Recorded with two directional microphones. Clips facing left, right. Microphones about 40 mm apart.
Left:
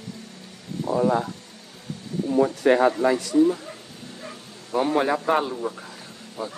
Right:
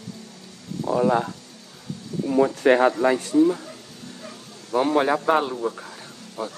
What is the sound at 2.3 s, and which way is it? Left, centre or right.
A man's voice, right.